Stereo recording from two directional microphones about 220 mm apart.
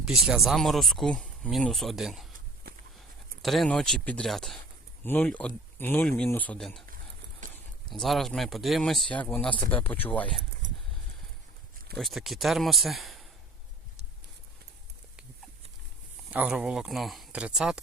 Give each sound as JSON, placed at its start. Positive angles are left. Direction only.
{"t": 0.0, "sound": "speech", "side_deg": 0}
{"t": 3.4, "sound": "speech", "side_deg": 0}
{"t": 7.4, "sound": "a sound", "side_deg": -35}
{"t": 7.9, "sound": "speech", "side_deg": 0}
{"t": 11.9, "sound": "speech", "side_deg": 0}
{"t": 16.3, "sound": "speech", "side_deg": -5}